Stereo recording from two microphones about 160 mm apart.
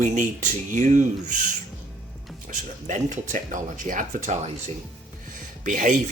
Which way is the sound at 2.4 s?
50° right (ahead or behind).